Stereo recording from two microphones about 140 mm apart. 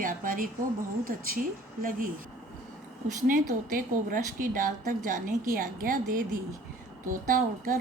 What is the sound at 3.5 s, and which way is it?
A woman's voice, 75° right (ahead or behind).